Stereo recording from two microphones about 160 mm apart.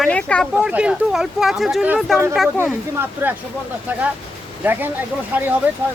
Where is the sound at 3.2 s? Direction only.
15° right (ahead or behind).